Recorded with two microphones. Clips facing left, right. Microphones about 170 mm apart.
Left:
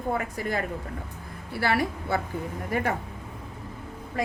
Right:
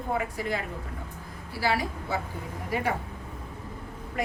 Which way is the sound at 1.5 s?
60° left (ahead or behind).